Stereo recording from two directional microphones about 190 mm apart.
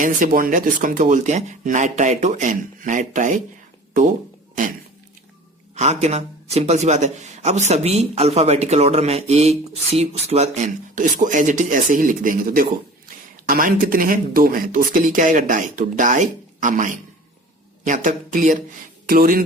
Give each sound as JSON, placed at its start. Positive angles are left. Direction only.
{"t": 0.0, "sound": "a man's voice", "side_deg": -45}
{"t": 5.7, "sound": "a man's voice", "side_deg": -35}